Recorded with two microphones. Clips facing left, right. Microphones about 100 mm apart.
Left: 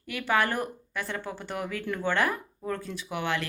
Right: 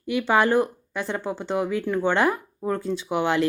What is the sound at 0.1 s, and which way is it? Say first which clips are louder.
Speech: right 7 dB; 25° right (ahead or behind).